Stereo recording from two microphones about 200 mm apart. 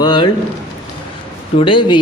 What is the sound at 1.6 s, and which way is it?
Speech, 25° left (ahead or behind).